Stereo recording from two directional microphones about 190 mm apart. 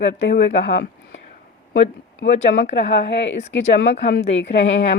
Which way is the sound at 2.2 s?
50° left (ahead or behind).